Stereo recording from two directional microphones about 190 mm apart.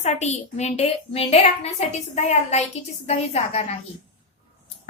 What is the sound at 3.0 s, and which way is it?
Speech, 35° left (ahead or behind).